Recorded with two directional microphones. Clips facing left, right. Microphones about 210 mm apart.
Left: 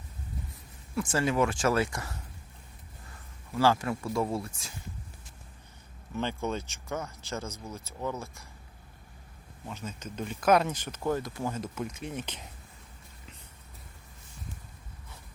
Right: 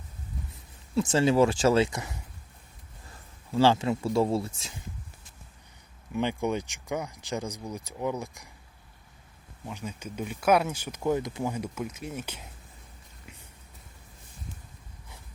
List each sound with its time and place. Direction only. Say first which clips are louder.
0.9 s speech: right 5 dB; 25° right (ahead or behind)
3.5 s speech: right 3 dB; 25° right (ahead or behind)
6.1 s speech: right 4 dB; 15° right (ahead or behind)
9.6 s speech: right 2 dB; 10° right (ahead or behind)